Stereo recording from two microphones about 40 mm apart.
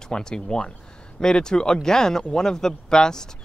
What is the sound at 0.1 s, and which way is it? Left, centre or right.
Speech, centre.